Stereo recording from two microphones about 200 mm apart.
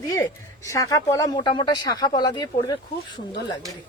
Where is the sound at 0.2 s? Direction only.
15° left (ahead or behind).